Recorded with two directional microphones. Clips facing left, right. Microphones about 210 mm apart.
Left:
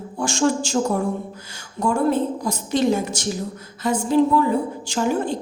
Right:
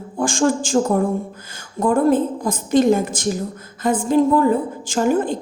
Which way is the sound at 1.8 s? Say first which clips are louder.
Right 4 dB; 50° right (ahead or behind).